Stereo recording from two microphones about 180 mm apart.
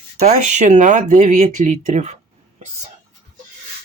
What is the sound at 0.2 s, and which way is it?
Speech, 40° right (ahead or behind).